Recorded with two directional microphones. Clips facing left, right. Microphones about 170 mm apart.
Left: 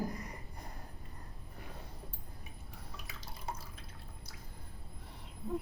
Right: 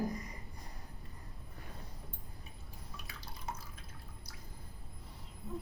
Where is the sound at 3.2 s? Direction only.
30° left (ahead or behind).